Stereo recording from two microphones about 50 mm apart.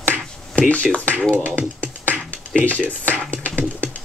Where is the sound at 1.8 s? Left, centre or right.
Left.